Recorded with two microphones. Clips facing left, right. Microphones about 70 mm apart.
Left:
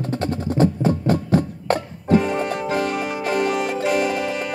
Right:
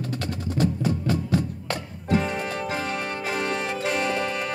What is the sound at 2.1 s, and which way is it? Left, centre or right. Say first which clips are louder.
Music: left 6 dB; centre.